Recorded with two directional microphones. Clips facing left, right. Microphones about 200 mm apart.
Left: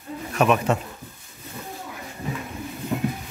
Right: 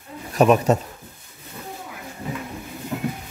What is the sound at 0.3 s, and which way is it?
Speech, 35° right (ahead or behind).